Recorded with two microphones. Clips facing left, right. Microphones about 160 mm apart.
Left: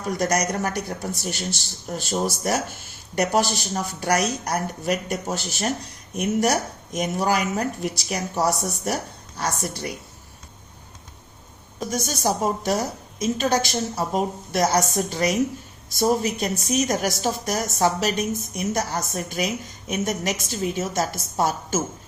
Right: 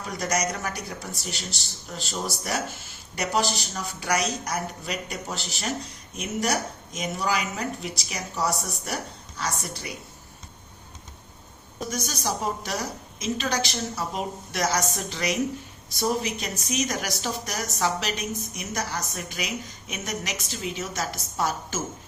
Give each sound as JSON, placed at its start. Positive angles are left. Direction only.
{"t": 0.2, "sound": "a woman's voice", "side_deg": 60}
{"t": 11.9, "sound": "speech", "side_deg": 45}